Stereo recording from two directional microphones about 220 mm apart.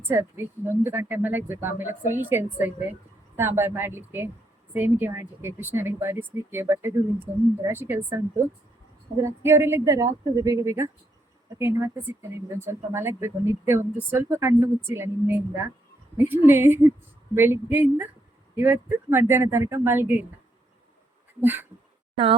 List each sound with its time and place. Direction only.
0.1 s speech: 10° right (ahead or behind)
16.1 s speech: 10° right (ahead or behind)
21.4 s speech: 10° right (ahead or behind)
22.1 s speech: 25° right (ahead or behind)